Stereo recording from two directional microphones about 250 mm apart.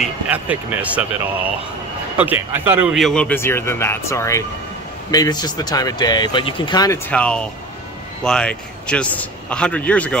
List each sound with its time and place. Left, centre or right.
0.0 s a man's voice: centre
2.1 s a man's voice: centre